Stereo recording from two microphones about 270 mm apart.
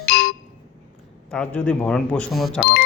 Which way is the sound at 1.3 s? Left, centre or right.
Centre.